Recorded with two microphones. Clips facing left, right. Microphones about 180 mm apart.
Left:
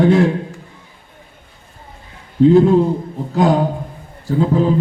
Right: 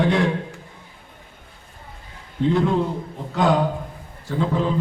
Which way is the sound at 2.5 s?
35° left (ahead or behind).